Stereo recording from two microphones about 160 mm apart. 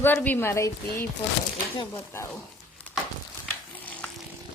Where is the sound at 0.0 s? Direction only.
10° left (ahead or behind).